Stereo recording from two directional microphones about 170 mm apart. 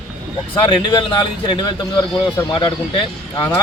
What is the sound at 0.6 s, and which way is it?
A man's voice, 30° left (ahead or behind).